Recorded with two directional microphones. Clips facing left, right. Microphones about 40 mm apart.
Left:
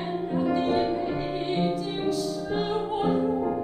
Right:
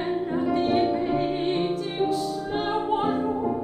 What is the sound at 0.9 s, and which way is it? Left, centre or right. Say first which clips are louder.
Music: right 3 dB; right.